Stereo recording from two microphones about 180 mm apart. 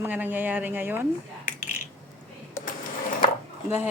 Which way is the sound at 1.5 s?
45° left (ahead or behind).